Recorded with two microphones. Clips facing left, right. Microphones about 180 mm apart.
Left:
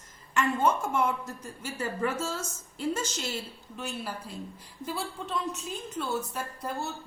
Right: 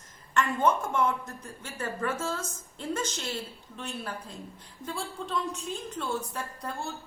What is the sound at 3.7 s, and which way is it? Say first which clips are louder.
A woman's voice: left 1 dB; 5° left (ahead or behind).